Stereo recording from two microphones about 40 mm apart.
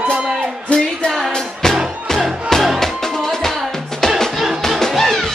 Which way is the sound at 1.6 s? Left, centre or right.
Centre.